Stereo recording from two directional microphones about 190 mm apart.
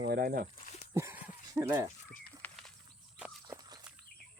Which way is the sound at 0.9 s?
15° right (ahead or behind).